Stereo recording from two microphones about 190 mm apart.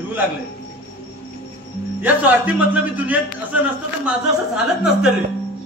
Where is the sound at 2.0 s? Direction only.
10° right (ahead or behind).